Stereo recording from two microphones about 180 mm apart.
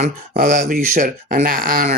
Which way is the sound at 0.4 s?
40° right (ahead or behind).